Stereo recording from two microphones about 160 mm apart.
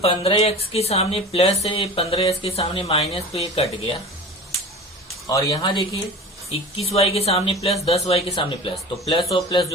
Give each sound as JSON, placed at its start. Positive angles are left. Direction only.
{"t": 0.0, "sound": "speech", "side_deg": 35}
{"t": 5.3, "sound": "speech", "side_deg": 20}